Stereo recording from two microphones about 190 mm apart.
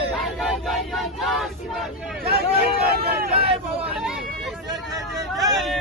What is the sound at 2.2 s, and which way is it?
Hubbub, 55° right (ahead or behind).